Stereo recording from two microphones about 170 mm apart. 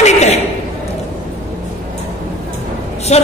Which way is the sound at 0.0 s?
40° left (ahead or behind).